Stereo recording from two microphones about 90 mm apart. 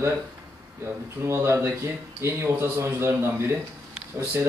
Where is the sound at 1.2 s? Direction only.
30° right (ahead or behind).